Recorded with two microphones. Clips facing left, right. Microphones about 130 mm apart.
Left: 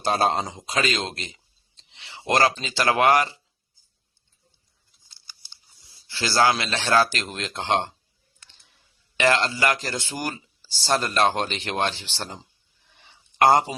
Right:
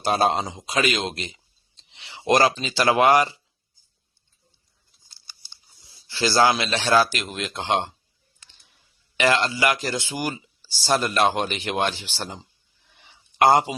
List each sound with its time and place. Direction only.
0.0 s speech: 15° right (ahead or behind)
5.2 s chewing: 40° right (ahead or behind)
6.1 s a man's voice: 20° right (ahead or behind)
9.4 s speech: 15° right (ahead or behind)
13.4 s speech: 10° right (ahead or behind)